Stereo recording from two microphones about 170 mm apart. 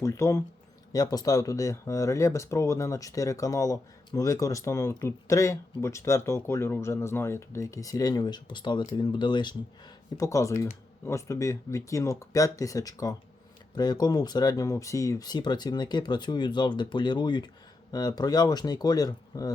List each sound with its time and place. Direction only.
0.0 s speech: 15° left (ahead or behind)